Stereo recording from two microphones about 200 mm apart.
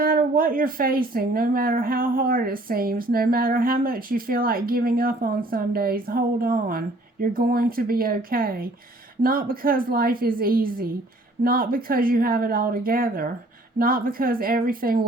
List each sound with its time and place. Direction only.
0.0 s speech: 45° right (ahead or behind)